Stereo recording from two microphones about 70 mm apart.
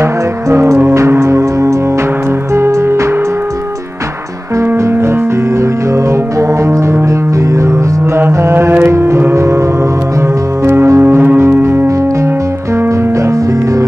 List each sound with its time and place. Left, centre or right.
0.0 s music: right
4.6 s music: right
8.3 s mantra: right
8.8 s music: right